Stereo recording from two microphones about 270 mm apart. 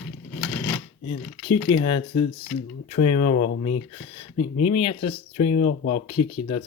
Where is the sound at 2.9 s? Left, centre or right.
Left.